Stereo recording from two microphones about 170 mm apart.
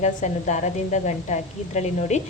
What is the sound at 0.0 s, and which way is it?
A woman's voice, 45° left (ahead or behind).